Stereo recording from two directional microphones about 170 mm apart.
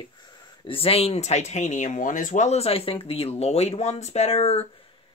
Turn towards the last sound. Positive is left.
turn(degrees=35)  # may be behind; listen again after turning